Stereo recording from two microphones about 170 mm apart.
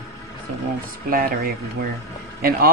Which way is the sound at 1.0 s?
60° right (ahead or behind).